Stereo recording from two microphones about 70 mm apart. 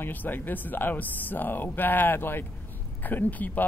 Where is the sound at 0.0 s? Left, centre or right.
Left.